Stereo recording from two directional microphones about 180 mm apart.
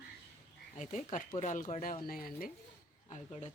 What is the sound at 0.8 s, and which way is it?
Speech, 40° left (ahead or behind).